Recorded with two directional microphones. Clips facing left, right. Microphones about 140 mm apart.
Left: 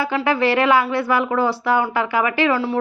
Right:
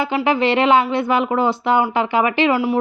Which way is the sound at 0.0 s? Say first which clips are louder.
Right 1 dB; 20° right (ahead or behind).